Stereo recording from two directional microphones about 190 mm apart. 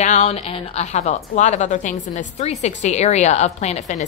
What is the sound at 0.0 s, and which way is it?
A woman's voice, 35° left (ahead or behind).